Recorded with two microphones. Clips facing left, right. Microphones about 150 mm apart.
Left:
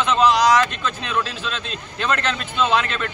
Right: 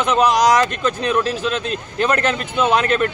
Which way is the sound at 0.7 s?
45° right (ahead or behind).